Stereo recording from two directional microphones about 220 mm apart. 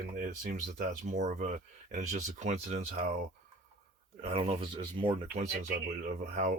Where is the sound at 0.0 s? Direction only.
40° right (ahead or behind); by 5.1 s 20° right (ahead or behind).